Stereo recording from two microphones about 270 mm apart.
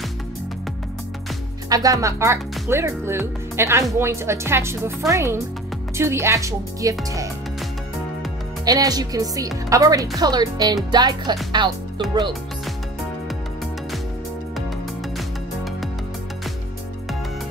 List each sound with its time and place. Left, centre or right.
1.7 s speech: centre
8.6 s speech: centre
15.1 s music: centre